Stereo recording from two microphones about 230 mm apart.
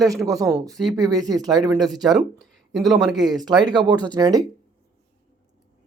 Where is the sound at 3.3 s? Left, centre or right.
Centre.